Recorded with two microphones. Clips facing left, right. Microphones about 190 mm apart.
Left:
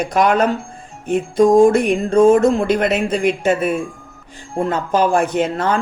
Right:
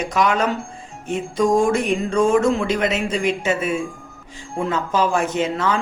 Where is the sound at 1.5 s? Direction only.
35° left (ahead or behind).